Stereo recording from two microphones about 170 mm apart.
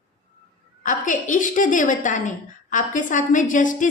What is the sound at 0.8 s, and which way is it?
A woman's voice, 50° left (ahead or behind).